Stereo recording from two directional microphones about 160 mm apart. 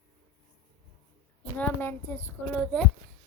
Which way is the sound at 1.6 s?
10° left (ahead or behind).